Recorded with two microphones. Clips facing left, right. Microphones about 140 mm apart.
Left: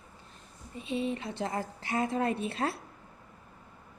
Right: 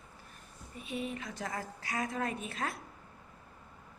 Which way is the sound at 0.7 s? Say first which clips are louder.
Left 6 dB; 25° left (ahead or behind).